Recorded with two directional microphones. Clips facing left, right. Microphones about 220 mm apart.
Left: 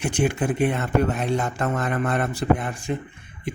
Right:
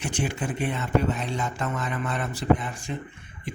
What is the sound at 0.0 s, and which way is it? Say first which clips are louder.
Speech: left 6 dB; 60° left (ahead or behind).